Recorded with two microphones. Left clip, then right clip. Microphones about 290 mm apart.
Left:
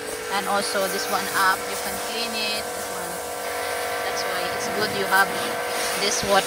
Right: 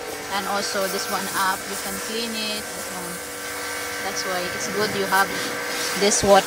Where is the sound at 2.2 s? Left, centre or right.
Centre.